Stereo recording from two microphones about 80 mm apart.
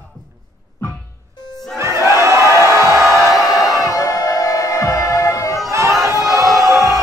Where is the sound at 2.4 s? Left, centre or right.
Left.